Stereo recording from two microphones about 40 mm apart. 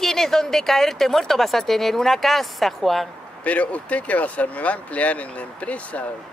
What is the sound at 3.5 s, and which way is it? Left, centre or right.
Speech, left.